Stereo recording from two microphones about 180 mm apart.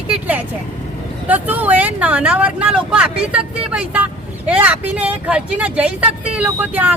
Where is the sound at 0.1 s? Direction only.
10° right (ahead or behind).